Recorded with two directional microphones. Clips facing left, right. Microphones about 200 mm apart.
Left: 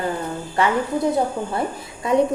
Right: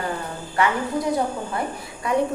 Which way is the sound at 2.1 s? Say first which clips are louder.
Left 4 dB; 25° left (ahead or behind).